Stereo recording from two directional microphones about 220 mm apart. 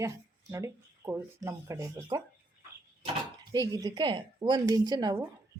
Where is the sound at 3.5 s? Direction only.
15° right (ahead or behind).